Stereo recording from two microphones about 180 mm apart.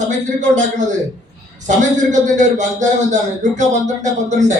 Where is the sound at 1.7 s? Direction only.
45° right (ahead or behind).